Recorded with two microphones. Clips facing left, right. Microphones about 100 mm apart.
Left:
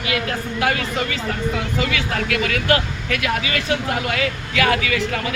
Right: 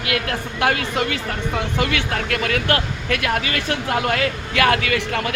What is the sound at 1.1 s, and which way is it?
Speech, 55° right (ahead or behind).